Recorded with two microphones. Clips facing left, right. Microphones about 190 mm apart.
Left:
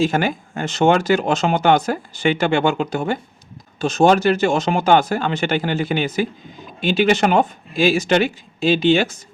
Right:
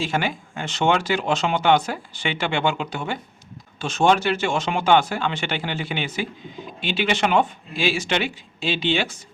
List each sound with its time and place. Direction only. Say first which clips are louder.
0.0 s speech: left 6 dB; 45° left (ahead or behind)